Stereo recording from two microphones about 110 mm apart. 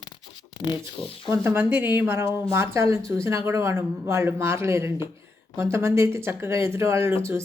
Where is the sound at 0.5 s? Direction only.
45° left (ahead or behind).